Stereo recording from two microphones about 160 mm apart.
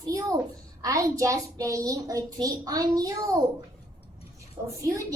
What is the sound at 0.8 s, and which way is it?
A woman's voice, 20° right (ahead or behind).